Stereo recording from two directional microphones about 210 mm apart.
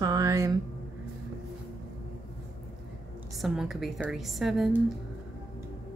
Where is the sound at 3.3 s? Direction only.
Centre (ahead or behind).